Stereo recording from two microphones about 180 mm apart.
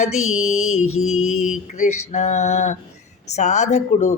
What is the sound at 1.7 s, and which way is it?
Speech, 45° left (ahead or behind).